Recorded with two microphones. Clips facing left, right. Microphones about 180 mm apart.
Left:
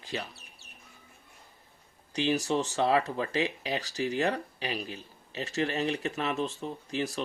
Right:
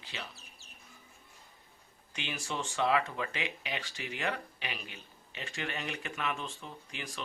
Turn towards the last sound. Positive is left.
turn(degrees=35)  # may be behind; listen again after turning